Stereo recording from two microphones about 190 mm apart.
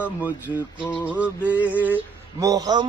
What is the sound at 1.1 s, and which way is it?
Mantra, 10° right (ahead or behind).